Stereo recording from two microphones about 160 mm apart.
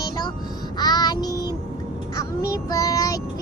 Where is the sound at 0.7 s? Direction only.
25° left (ahead or behind).